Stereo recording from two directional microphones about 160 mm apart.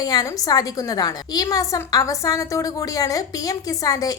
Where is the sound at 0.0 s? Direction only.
25° left (ahead or behind).